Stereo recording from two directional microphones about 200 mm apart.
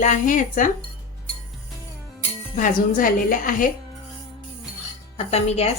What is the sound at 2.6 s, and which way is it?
A woman's voice, 40° left (ahead or behind).